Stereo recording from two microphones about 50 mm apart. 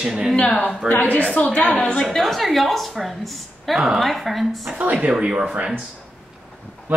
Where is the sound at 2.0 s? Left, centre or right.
Centre.